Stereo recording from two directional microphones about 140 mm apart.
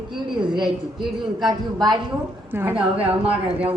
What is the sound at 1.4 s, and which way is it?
Speech, 30° right (ahead or behind).